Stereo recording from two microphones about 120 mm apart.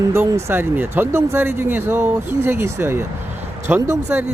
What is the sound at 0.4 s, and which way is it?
Speech, 20° right (ahead or behind).